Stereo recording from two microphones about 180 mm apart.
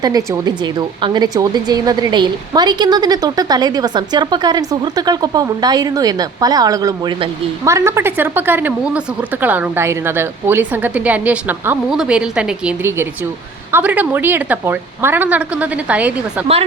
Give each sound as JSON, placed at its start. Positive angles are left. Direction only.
{"t": 0.0, "sound": "a woman's voice", "side_deg": -20}